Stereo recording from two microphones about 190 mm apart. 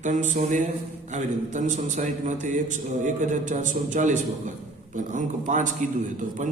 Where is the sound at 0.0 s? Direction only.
40° right (ahead or behind).